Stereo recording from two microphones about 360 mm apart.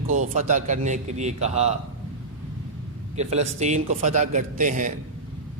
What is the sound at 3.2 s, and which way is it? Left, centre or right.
A man's voice, centre.